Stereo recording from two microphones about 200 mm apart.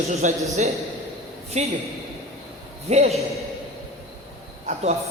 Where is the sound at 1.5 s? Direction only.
35° right (ahead or behind).